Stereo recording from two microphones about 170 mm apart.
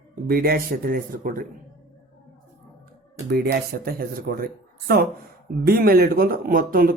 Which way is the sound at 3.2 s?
65° right (ahead or behind).